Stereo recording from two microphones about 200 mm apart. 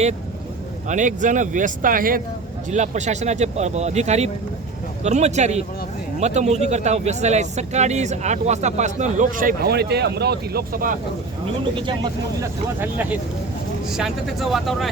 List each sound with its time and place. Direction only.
0.9 s speech: 40° right (ahead or behind)
12.4 s speech: 10° right (ahead or behind)